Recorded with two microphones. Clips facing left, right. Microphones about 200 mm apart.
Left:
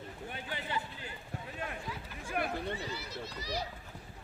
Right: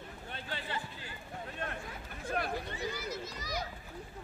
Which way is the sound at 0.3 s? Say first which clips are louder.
Even; 15° left (ahead or behind).